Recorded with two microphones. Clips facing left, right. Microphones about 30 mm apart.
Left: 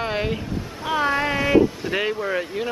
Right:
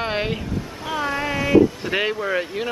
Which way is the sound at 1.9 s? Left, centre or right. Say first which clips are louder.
Right 1 dB; centre.